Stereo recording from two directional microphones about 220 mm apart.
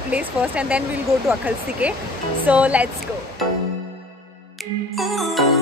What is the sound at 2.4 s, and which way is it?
Speech, 5° right (ahead or behind).